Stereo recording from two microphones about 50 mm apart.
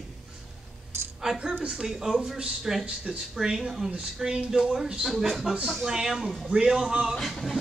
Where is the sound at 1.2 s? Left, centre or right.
Centre.